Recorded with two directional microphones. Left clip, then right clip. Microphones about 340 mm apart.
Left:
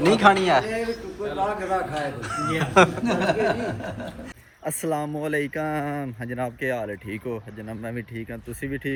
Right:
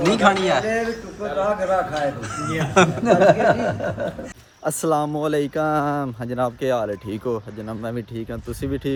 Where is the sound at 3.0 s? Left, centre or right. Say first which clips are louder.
Right 8 dB; right.